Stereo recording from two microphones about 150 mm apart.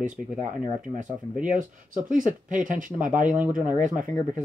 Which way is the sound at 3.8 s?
60° right (ahead or behind).